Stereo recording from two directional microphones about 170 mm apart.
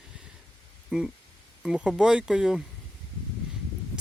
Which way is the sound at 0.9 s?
5° right (ahead or behind).